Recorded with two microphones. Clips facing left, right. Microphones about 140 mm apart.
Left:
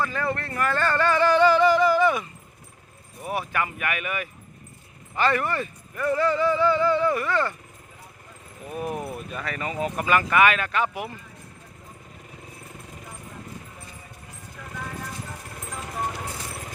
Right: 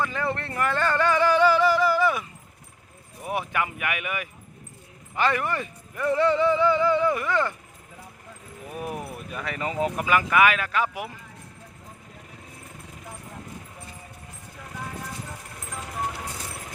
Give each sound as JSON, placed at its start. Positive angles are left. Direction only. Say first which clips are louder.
{"t": 0.0, "sound": "a sound", "louder": "left 1 dB", "side_deg": -20}
{"t": 3.2, "sound": "speech", "louder": "even", "side_deg": -15}
{"t": 8.7, "sound": "speech", "louder": "left 3 dB", "side_deg": -5}
{"t": 10.0, "sound": "speech", "louder": "left 1 dB", "side_deg": -5}